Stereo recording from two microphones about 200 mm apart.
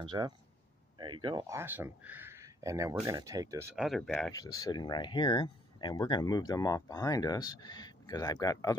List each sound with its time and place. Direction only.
0.0 s speech: 20° right (ahead or behind)
3.8 s speech: centre (ahead or behind)
4.3 s speech: 15° left (ahead or behind)